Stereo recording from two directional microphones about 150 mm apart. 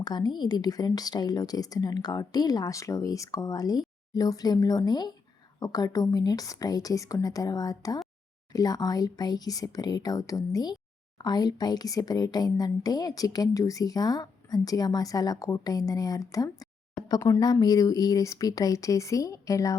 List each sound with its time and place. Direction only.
0.0 s speech: 25° left (ahead or behind)